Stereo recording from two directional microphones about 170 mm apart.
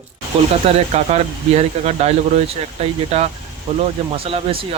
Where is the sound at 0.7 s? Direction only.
40° right (ahead or behind).